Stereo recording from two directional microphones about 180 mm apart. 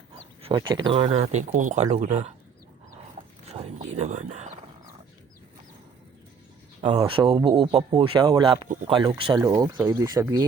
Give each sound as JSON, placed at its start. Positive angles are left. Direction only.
{"t": 0.4, "sound": "speech", "side_deg": -25}
{"t": 3.5, "sound": "a sound", "side_deg": -35}
{"t": 7.1, "sound": "speech", "side_deg": -30}